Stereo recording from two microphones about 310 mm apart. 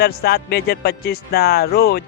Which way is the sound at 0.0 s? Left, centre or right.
Left.